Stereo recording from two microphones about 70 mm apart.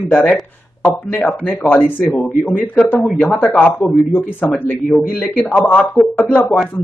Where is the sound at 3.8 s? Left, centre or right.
Centre.